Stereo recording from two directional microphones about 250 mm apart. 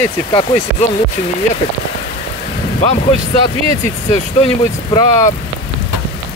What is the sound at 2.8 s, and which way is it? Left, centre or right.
Speech, left.